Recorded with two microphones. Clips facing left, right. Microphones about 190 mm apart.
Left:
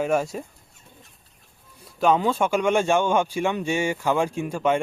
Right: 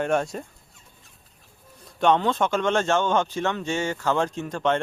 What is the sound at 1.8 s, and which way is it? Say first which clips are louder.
Speech: even; 5° left (ahead or behind).